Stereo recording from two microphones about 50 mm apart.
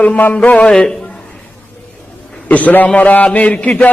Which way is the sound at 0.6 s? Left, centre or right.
Centre.